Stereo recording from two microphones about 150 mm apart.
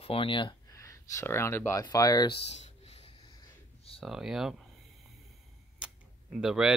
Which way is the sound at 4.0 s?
5° right (ahead or behind).